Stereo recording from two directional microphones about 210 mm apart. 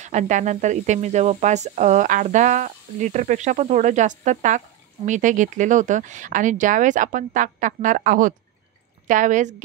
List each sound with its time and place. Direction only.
0.0 s speech: 35° right (ahead or behind)